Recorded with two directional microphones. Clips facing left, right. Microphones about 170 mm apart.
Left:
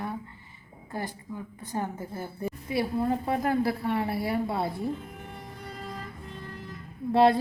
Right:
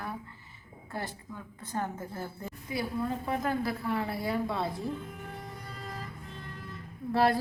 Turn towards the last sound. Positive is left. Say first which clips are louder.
# left 5 dB
turn(degrees=25)  # may be behind; listen again after turning